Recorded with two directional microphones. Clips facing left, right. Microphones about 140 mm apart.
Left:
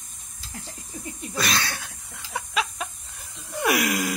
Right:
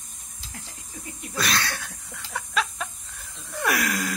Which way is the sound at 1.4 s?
5° left (ahead or behind).